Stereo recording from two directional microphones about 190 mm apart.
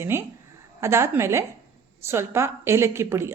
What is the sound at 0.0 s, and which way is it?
A woman's voice, 10° right (ahead or behind).